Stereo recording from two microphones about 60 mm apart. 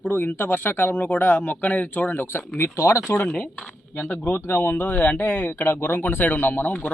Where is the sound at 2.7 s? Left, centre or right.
Left.